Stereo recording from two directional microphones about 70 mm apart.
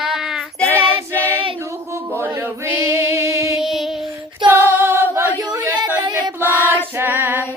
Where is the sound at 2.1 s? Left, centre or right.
Right.